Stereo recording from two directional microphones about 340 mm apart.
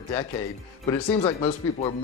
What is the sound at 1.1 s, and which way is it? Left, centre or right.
Speech, centre.